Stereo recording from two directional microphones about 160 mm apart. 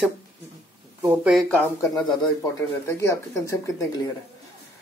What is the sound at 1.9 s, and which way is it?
Speech, 25° left (ahead or behind).